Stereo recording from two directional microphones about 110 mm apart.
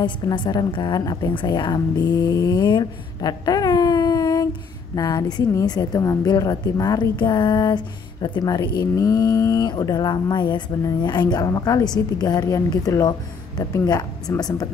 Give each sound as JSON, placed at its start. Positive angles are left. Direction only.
{"t": 0.0, "sound": "a woman's voice", "side_deg": 40}